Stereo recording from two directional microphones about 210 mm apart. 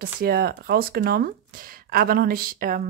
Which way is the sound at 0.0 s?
45° right (ahead or behind).